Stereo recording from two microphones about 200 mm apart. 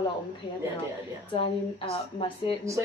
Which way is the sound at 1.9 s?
25° left (ahead or behind).